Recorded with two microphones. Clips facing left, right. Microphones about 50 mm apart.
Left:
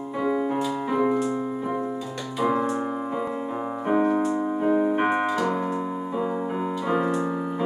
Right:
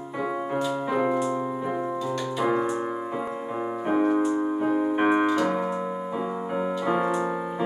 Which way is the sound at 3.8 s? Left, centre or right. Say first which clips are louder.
Left 1 dB; centre.